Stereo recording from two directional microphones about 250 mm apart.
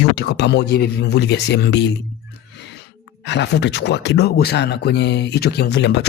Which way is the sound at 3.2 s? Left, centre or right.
Left.